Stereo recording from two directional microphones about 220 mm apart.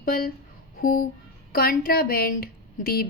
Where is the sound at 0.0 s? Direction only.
40° left (ahead or behind).